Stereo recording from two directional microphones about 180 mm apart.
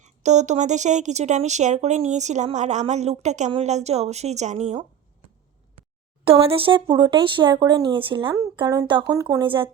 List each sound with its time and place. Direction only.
0.0 s speech: 40° right (ahead or behind)
6.2 s a woman's voice: 30° right (ahead or behind)